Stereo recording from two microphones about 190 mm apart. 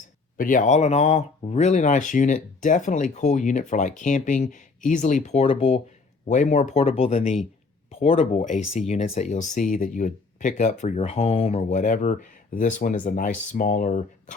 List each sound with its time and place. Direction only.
0.3 s speech: 45° left (ahead or behind)